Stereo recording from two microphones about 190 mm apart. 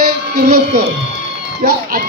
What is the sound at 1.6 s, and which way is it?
Speech, 45° right (ahead or behind).